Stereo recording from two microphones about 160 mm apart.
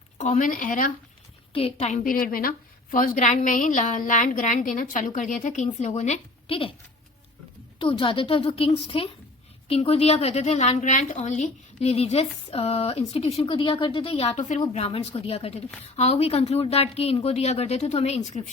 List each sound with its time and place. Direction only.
0.2 s speech: 50° left (ahead or behind)
1.5 s a woman's voice: 40° left (ahead or behind)
2.0 s a woman's voice: 60° left (ahead or behind); by 6.7 s 35° left (ahead or behind)
7.8 s a woman's voice: 35° left (ahead or behind)